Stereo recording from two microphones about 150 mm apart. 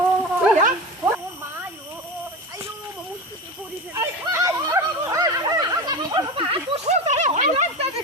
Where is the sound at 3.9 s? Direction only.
20° right (ahead or behind); by 7.9 s 50° right (ahead or behind).